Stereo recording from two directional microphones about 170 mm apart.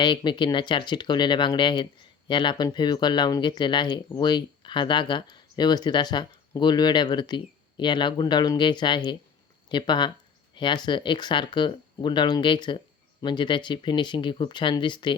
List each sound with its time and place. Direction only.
0.0 s speech: 30° left (ahead or behind)